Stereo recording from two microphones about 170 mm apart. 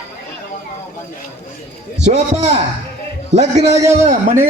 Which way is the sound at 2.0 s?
40° right (ahead or behind).